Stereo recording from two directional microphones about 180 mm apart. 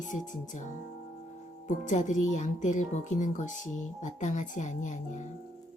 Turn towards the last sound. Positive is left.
turn(degrees=45)  # may be behind; listen again after turning